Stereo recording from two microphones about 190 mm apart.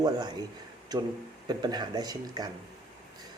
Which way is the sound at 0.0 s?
20° right (ahead or behind).